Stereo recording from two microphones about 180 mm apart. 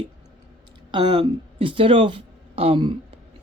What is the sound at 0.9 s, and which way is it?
Speech, 25° right (ahead or behind).